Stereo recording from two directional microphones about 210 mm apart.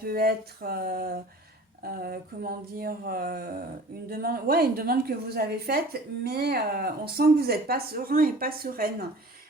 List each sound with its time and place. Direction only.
0.0 s a woman's voice: 45° right (ahead or behind)